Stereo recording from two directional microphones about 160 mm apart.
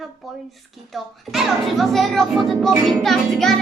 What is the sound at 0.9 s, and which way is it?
Speech, centre (ahead or behind).